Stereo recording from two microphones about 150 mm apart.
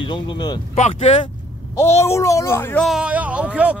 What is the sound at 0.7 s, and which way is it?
Speech, 50° left (ahead or behind).